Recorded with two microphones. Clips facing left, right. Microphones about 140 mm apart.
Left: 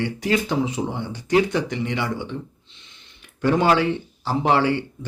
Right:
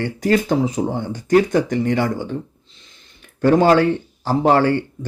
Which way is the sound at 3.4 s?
40° right (ahead or behind).